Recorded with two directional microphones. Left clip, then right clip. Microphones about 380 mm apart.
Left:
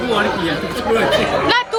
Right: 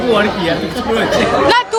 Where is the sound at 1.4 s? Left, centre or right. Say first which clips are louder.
Right 4 dB; centre.